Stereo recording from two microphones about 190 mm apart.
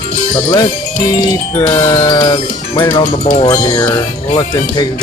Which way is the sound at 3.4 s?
20° left (ahead or behind).